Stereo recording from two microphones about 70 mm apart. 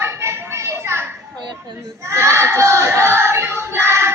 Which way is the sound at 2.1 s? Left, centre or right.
Right.